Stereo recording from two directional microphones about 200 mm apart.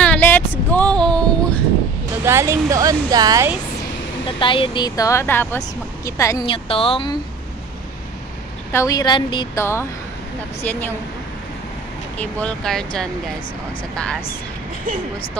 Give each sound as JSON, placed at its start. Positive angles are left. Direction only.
{"t": 0.0, "sound": "a sound", "side_deg": 10}
{"t": 2.2, "sound": "speech", "side_deg": -15}
{"t": 4.4, "sound": "a woman's voice", "side_deg": 25}
{"t": 8.7, "sound": "speech", "side_deg": 15}
{"t": 12.2, "sound": "speech", "side_deg": 5}